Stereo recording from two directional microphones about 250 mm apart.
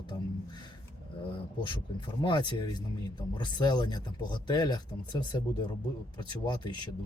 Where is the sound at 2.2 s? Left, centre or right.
Centre.